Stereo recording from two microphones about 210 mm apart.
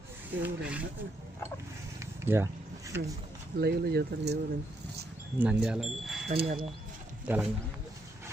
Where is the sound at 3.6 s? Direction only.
50° right (ahead or behind).